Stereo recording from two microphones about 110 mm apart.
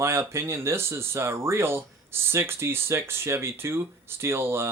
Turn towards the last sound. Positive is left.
turn(degrees=-20)  # may be behind; listen again after turning